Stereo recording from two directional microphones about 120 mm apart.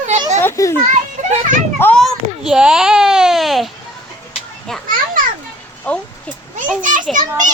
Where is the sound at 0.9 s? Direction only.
90° right.